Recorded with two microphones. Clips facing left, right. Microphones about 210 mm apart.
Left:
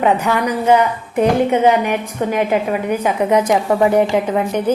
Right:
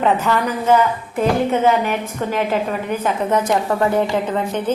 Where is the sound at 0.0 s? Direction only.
15° left (ahead or behind).